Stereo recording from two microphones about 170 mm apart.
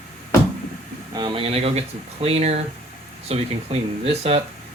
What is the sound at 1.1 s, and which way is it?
Speech, 30° right (ahead or behind).